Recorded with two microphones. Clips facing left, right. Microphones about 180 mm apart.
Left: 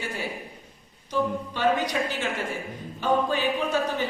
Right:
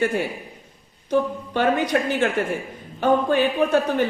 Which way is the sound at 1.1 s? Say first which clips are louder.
Right 5 dB; 55° right (ahead or behind).